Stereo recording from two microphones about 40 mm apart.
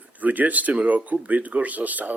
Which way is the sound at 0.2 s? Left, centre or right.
Right.